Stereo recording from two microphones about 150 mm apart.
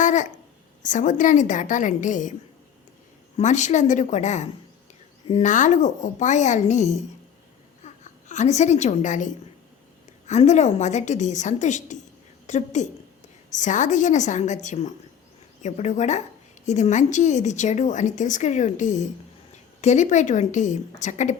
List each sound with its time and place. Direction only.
0.0 s a sound: 55° left (ahead or behind)
0.8 s a woman's voice: 55° left (ahead or behind)
3.3 s a woman's voice: 55° left (ahead or behind)